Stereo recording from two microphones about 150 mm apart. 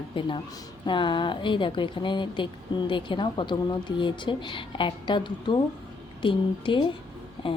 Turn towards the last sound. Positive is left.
turn(degrees=35)  # may be behind; listen again after turning